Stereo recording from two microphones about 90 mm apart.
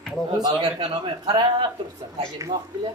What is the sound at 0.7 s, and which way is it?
Speech, 85° right.